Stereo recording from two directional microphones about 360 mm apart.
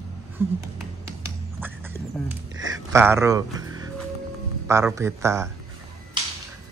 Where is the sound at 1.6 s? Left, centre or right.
Centre.